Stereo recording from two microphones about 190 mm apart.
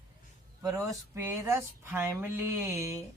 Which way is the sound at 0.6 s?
15° right (ahead or behind).